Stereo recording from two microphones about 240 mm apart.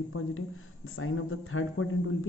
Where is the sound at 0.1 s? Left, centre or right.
Left.